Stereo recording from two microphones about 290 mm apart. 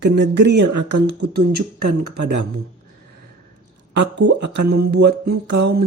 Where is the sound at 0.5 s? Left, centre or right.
Right.